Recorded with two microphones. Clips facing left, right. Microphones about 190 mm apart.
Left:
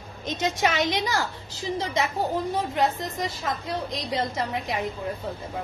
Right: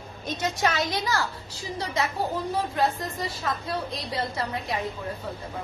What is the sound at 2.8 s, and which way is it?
A woman's voice, 20° left (ahead or behind).